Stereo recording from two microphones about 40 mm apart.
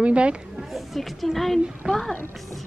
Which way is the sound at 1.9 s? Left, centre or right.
Centre.